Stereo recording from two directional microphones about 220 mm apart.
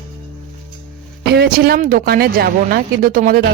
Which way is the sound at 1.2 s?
45° right (ahead or behind).